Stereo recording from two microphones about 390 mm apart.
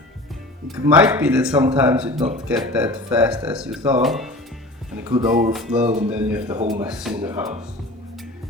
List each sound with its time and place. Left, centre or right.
0.9 s speech: centre
5.0 s speech: centre
5.3 s music: centre
5.5 s speech: centre